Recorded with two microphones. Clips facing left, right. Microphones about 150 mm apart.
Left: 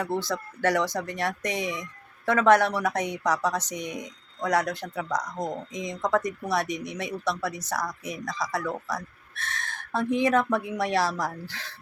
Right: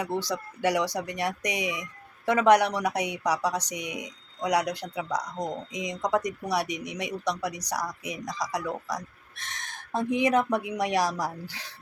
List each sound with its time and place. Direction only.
0.2 s speech: 15° right (ahead or behind)